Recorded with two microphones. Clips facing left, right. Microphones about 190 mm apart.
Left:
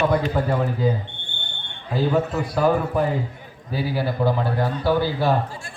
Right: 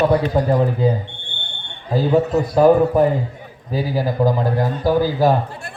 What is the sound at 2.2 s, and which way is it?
Speech, 40° right (ahead or behind).